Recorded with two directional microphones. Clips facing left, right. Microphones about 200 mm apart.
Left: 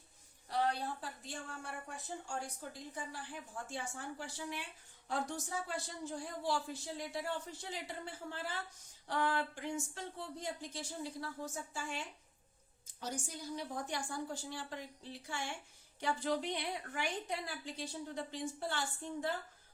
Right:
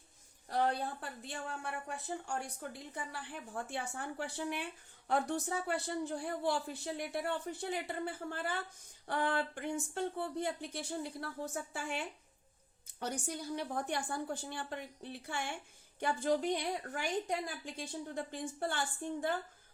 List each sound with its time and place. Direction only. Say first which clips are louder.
0.5 s a woman's voice: right 2 dB; 55° right (ahead or behind)